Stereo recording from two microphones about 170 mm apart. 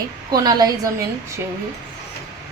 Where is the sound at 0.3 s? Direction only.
25° right (ahead or behind).